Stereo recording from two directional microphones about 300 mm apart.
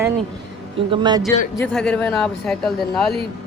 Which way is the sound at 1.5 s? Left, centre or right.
Centre.